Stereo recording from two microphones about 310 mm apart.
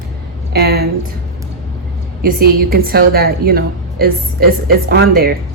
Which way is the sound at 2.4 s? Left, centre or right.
Right.